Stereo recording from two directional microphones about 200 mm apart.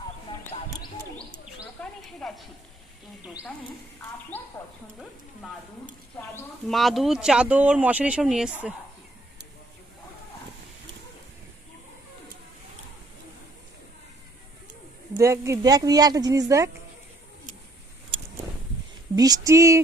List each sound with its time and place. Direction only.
0.3 s a sound: 25° left (ahead or behind)
1.8 s speech: 5° left (ahead or behind)
4.3 s a woman's voice: 10° left (ahead or behind)
6.1 s a woman's voice: 10° left (ahead or behind)
6.7 s speech: centre (ahead or behind)
15.2 s speech: 15° right (ahead or behind)
19.1 s speech: 20° right (ahead or behind)